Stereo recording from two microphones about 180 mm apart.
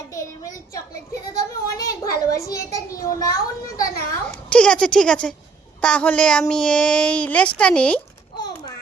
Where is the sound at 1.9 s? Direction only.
15° left (ahead or behind).